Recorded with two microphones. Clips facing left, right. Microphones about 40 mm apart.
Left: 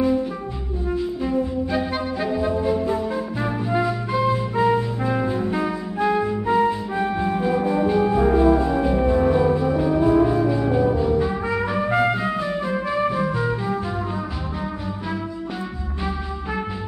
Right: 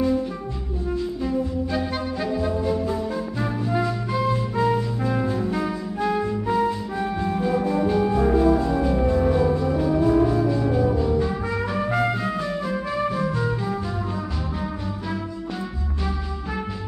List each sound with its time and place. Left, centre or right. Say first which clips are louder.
0.8 s music: left 2 dB; centre